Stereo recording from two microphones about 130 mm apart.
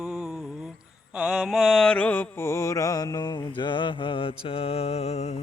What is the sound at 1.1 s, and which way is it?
Mantra, 5° right (ahead or behind).